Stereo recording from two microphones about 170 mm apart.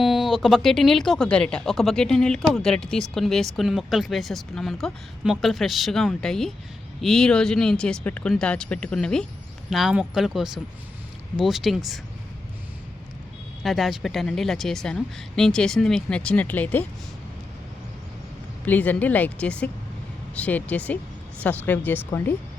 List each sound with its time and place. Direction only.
0.0 s speech: centre (ahead or behind)
13.6 s speech: centre (ahead or behind)
18.6 s a woman's voice: 10° left (ahead or behind)